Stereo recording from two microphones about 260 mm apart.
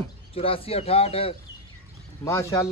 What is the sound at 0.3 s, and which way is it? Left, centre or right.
A man's voice, left.